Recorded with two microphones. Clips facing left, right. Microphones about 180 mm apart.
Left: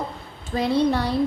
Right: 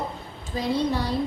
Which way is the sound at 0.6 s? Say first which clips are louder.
Left 4 dB; 65° left (ahead or behind).